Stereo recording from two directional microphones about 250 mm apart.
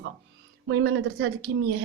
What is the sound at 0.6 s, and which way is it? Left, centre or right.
Speech, right.